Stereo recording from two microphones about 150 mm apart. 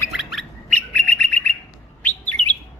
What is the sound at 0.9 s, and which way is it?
Bird, 10° left (ahead or behind).